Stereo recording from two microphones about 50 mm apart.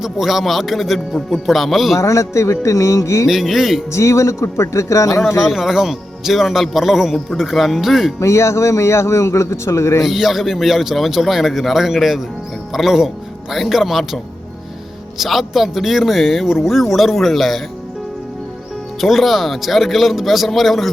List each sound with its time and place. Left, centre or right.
0.0 s a man's voice: centre
2.0 s a man's voice: left
3.2 s a man's voice: centre
3.9 s a man's voice: left
5.4 s a man's voice: centre
8.2 s a man's voice: left
10.0 s a man's voice: centre
15.2 s a man's voice: centre
18.9 s a man's voice: centre